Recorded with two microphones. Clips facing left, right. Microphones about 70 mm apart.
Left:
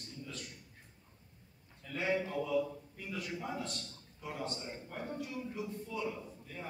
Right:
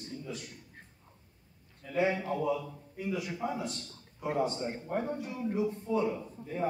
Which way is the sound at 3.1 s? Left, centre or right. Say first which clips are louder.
Right 4 dB; centre.